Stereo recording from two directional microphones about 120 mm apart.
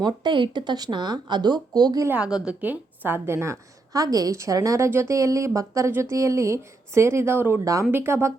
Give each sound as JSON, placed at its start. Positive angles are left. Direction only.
{"t": 0.0, "sound": "speech", "side_deg": -40}
{"t": 2.0, "sound": "a woman's voice", "side_deg": -10}